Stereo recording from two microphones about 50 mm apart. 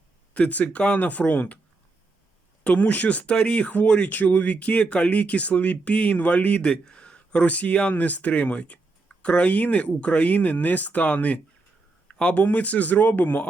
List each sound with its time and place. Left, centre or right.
0.3 s speech: left
2.6 s speech: left
12.0 s a sound: left
12.4 s speech: left